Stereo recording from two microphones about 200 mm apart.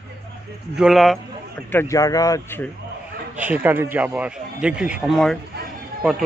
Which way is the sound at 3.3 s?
10° right (ahead or behind).